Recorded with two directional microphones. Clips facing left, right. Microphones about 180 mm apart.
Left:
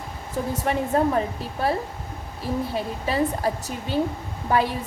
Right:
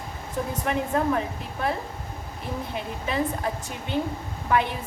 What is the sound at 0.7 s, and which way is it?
Speech, 35° left (ahead or behind).